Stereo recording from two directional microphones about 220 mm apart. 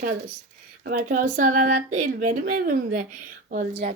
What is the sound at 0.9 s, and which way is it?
Speech, 35° right (ahead or behind).